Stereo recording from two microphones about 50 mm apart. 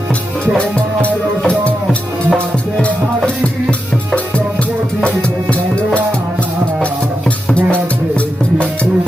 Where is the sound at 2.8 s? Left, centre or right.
Left.